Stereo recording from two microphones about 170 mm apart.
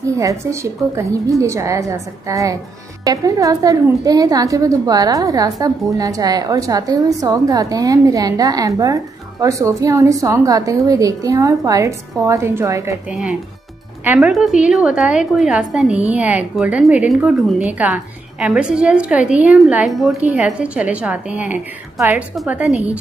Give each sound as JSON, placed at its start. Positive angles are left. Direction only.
{"t": 0.0, "sound": "a woman's voice", "side_deg": -20}
{"t": 13.1, "sound": "a woman's voice", "side_deg": -5}